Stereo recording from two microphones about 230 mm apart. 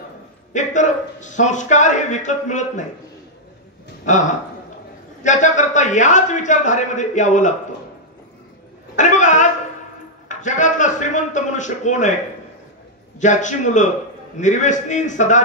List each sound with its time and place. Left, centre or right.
0.5 s a man's voice: left
4.0 s a man's voice: left
8.9 s a sound: left
10.2 s a man's voice: left
13.2 s a man's voice: left